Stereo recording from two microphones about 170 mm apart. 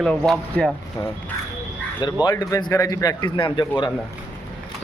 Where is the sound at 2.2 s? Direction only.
20° left (ahead or behind).